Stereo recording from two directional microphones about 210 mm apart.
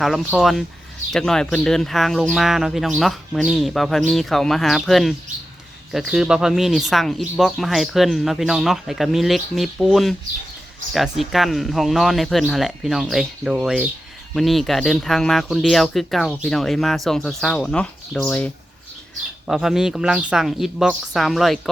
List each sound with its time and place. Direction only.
0.0 s speech: 5° right (ahead or behind)